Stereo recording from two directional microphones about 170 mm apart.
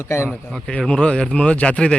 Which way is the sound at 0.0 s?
15° left (ahead or behind).